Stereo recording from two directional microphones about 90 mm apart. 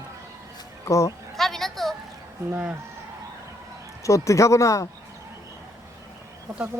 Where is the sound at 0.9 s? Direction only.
35° left (ahead or behind).